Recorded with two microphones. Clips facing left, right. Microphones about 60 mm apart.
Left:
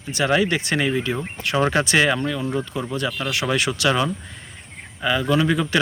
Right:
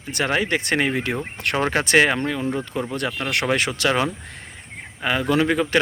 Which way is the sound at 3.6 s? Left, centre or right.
Right.